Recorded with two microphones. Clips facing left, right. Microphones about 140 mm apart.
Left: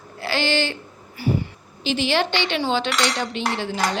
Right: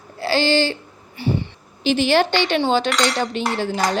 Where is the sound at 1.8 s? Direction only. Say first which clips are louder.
Right 5 dB; 45° right (ahead or behind).